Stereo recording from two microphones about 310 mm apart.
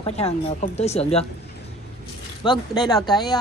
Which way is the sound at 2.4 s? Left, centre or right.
Centre.